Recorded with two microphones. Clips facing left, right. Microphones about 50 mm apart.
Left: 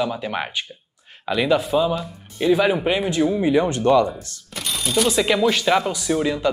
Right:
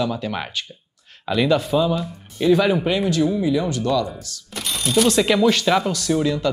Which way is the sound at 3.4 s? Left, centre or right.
Left.